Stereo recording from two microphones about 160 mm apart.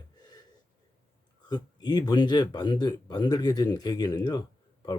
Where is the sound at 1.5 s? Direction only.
25° left (ahead or behind).